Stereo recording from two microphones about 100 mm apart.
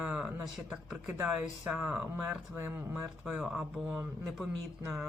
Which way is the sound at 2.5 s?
20° right (ahead or behind).